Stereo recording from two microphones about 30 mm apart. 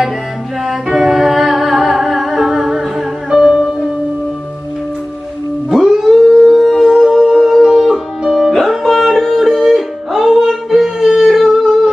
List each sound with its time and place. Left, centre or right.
0.7 s music: centre
5.7 s music: centre
6.2 s howl: centre
6.9 s music: centre
8.2 s music: centre
8.9 s music: centre